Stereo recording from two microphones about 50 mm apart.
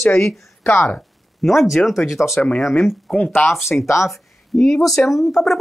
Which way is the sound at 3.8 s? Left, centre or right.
Left.